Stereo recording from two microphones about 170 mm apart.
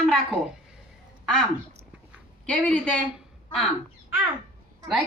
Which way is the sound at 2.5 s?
5° left (ahead or behind).